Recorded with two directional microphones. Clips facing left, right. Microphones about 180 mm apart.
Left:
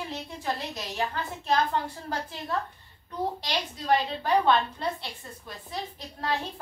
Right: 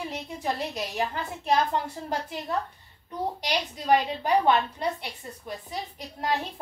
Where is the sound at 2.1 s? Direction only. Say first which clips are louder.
Right 2 dB; 20° right (ahead or behind).